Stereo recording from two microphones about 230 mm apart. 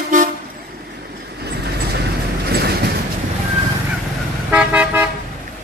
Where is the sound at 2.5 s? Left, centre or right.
Right.